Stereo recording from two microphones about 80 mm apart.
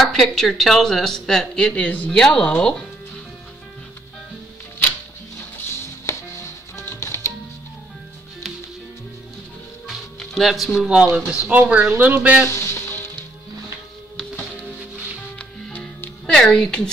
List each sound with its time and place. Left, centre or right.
0.0 s speech: centre
6.1 s music: left
9.8 s music: centre
10.9 s speech: centre
11.9 s speech: right
12.4 s speech: left
15.3 s music: centre
16.3 s speech: centre